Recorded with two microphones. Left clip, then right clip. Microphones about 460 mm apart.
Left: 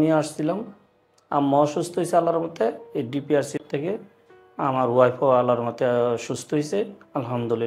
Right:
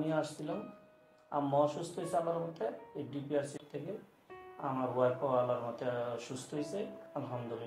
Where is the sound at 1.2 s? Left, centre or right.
Left.